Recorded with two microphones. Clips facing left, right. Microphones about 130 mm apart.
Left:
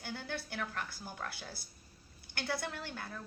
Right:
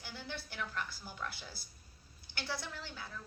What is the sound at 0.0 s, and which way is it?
A woman's voice, 55° left (ahead or behind).